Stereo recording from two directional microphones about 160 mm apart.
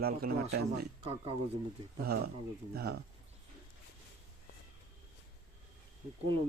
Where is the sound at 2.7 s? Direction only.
90° right.